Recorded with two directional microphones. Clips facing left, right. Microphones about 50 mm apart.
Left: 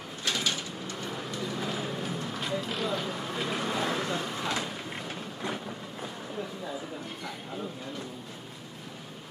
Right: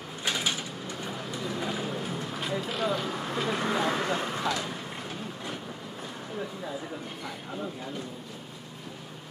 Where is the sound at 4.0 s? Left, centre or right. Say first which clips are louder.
Right 2 dB; right.